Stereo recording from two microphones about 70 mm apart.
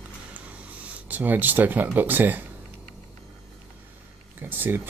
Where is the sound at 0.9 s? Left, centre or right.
Right.